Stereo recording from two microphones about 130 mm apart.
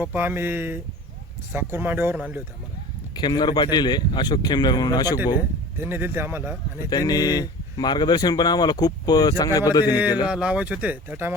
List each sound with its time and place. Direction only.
0.0 s speech: 15° right (ahead or behind)
3.2 s speech: 35° left (ahead or behind)
5.7 s speech: 15° right (ahead or behind)
6.9 s speech: 30° left (ahead or behind)
10.2 s speech: 5° right (ahead or behind)